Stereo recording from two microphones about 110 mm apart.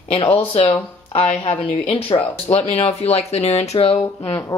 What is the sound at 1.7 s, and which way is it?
Speech, 55° left (ahead or behind).